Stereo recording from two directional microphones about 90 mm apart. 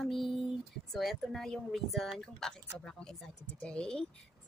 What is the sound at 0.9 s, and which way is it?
A woman's voice, centre (ahead or behind).